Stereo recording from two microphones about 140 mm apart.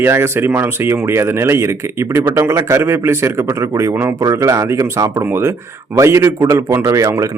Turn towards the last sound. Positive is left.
turn(degrees=-20)  # may be behind; listen again after turning